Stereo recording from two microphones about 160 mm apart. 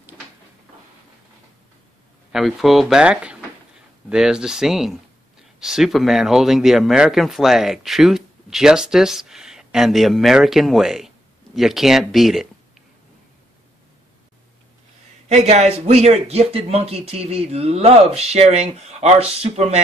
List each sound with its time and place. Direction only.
2.3 s speech: centre (ahead or behind)
15.2 s a man's voice: 45° right (ahead or behind)